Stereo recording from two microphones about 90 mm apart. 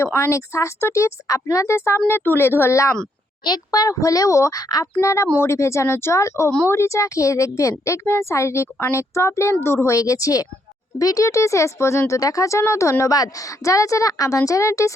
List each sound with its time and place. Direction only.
0.0 s speech: 30° left (ahead or behind)
3.4 s a child's voice: 50° left (ahead or behind)
4.9 s speech: 35° left (ahead or behind)